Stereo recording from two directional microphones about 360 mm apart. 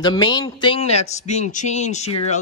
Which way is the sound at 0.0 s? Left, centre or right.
Centre.